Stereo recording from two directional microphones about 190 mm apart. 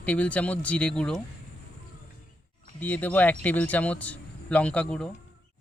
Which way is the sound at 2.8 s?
10° left (ahead or behind).